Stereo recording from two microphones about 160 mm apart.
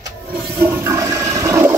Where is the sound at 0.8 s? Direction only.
15° right (ahead or behind).